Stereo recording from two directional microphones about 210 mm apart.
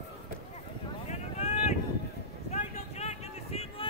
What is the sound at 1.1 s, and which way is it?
Vehicle, 35° left (ahead or behind).